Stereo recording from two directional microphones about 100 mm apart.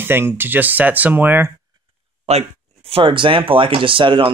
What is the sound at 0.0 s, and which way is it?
Speech, 20° right (ahead or behind).